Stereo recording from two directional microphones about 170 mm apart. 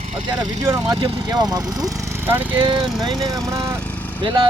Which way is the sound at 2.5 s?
30° right (ahead or behind).